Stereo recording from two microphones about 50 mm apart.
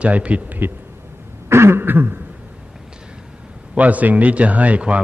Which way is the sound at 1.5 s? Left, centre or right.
Right.